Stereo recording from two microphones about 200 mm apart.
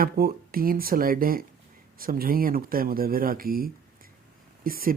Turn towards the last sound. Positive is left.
turn(degrees=-45)  # may be behind; listen again after turning